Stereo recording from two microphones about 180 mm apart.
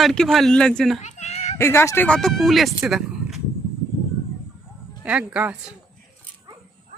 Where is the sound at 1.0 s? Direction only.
40° left (ahead or behind).